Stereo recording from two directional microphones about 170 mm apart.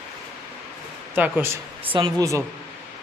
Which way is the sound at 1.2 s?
10° right (ahead or behind).